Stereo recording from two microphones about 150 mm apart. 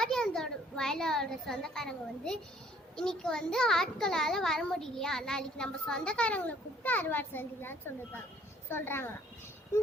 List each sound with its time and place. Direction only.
0.0 s a child's voice: 5° left (ahead or behind)